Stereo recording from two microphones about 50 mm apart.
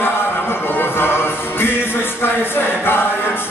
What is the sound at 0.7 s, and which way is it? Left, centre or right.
Music, left.